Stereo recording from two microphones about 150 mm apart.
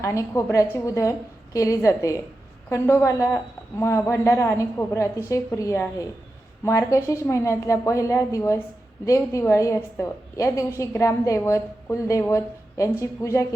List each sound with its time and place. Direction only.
0.0 s a woman's voice: 20° left (ahead or behind)